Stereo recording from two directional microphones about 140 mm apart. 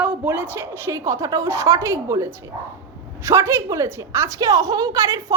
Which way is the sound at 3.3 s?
20° right (ahead or behind).